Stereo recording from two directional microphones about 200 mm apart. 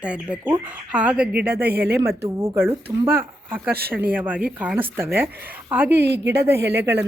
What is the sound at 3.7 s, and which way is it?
Speech, 50° right (ahead or behind).